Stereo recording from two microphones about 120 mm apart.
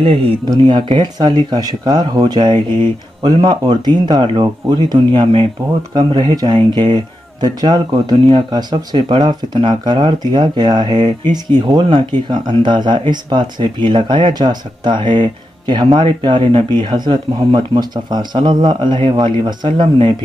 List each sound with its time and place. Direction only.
0.0 s speech: 50° right (ahead or behind)
0.5 s speech: 40° right (ahead or behind)